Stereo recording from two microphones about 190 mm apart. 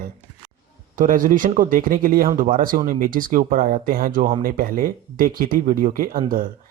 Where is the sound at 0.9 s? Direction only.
45° right (ahead or behind).